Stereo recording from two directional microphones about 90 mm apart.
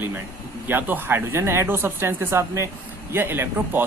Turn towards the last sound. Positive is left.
turn(degrees=-25)  # may be behind; listen again after turning